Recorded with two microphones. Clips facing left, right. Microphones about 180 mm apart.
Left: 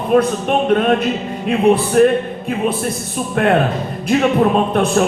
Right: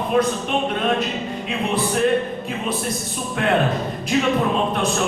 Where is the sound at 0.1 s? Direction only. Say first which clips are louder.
Left 6 dB; 50° left (ahead or behind).